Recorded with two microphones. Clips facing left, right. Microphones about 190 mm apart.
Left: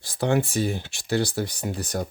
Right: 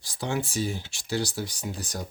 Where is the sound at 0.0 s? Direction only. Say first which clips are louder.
Left 7 dB; 60° left (ahead or behind).